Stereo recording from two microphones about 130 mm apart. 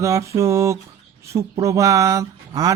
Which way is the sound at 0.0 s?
25° right (ahead or behind).